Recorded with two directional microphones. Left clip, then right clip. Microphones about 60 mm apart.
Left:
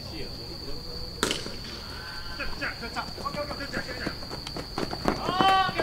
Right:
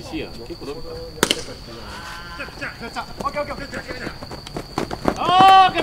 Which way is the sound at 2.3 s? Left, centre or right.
Right.